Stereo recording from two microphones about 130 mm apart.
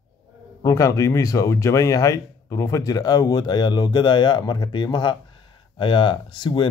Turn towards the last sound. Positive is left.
turn(degrees=35)  # may be behind; listen again after turning